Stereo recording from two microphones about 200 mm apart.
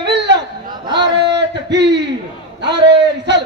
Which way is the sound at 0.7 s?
20° right (ahead or behind).